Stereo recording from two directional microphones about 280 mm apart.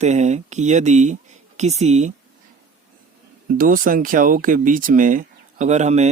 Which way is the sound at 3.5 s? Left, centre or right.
Right.